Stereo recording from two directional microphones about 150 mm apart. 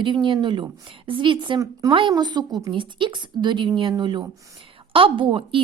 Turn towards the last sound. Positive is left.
turn(degrees=-35)  # may be behind; listen again after turning